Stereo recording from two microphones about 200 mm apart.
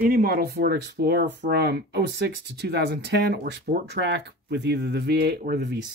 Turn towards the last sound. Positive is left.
turn(degrees=-55)  # may be behind; listen again after turning